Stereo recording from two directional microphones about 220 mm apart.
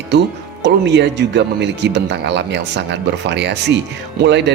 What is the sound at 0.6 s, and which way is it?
Speech, 50° right (ahead or behind).